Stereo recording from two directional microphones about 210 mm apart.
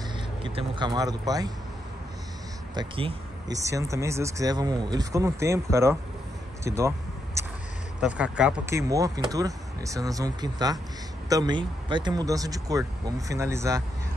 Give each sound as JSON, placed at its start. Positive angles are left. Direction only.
{"t": 0.4, "sound": "speech", "side_deg": -25}
{"t": 2.7, "sound": "speech", "side_deg": -25}
{"t": 3.6, "sound": "speech", "side_deg": -15}
{"t": 8.0, "sound": "speech", "side_deg": -5}